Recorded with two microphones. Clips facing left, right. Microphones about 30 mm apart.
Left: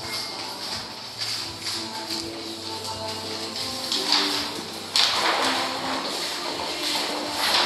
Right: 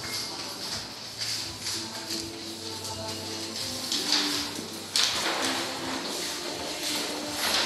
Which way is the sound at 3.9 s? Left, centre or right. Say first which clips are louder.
Left 4 dB; left.